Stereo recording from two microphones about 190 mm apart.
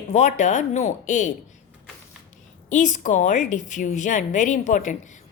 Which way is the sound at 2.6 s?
40° left (ahead or behind).